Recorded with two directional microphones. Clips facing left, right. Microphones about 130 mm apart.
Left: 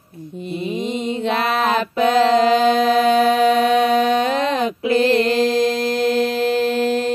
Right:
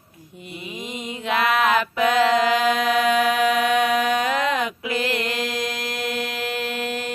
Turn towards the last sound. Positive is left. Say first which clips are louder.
# left 9 dB
turn(degrees=30)  # may be behind; listen again after turning